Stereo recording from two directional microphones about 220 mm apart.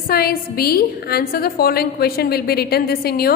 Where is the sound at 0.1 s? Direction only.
45° left (ahead or behind).